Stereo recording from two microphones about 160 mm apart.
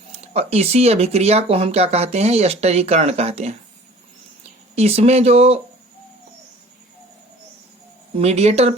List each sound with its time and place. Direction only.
0.1 s speech: 40° right (ahead or behind)
4.7 s speech: 40° right (ahead or behind)
8.1 s speech: 40° right (ahead or behind)